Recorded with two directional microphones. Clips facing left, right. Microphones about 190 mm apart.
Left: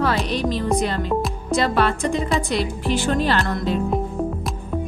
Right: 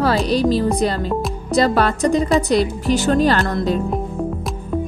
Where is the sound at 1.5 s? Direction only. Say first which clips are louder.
Right 3 dB; 40° right (ahead or behind).